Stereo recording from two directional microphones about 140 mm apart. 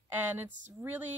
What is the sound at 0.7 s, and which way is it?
Speech, 15° right (ahead or behind).